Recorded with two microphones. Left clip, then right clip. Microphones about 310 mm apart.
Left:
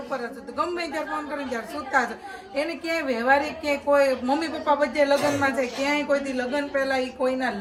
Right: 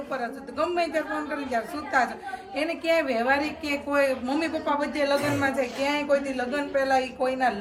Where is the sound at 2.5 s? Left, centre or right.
Centre.